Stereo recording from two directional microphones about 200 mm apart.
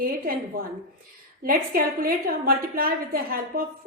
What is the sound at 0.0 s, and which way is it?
A woman's voice, 45° right (ahead or behind).